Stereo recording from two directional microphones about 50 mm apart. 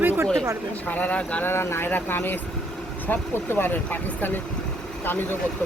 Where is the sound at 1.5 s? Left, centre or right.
Left.